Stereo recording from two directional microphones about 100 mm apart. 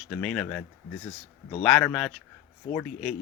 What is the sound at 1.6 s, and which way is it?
Speech, 10° left (ahead or behind).